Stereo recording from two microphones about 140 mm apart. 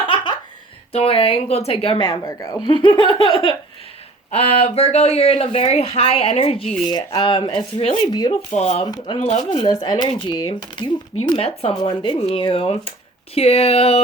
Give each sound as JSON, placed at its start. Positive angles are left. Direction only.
{"t": 0.9, "sound": "speech", "side_deg": 45}
{"t": 2.2, "sound": "speech", "side_deg": 25}
{"t": 4.3, "sound": "speech", "side_deg": 50}
{"t": 6.8, "sound": "speech", "side_deg": 30}
{"t": 8.1, "sound": "speech", "side_deg": 30}
{"t": 8.4, "sound": "speech", "side_deg": 55}
{"t": 8.9, "sound": "speech", "side_deg": 25}
{"t": 11.3, "sound": "speech", "side_deg": 45}
{"t": 11.7, "sound": "speech", "side_deg": 30}